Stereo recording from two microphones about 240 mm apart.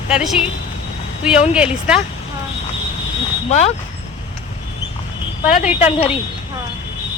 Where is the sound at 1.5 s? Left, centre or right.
Centre.